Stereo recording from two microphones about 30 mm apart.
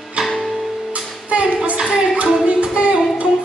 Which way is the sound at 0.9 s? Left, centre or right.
Right.